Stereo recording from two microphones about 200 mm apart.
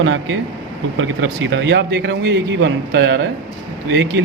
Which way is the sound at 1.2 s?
65° right (ahead or behind).